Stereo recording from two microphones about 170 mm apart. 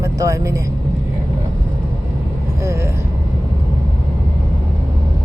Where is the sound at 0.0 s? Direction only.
20° right (ahead or behind).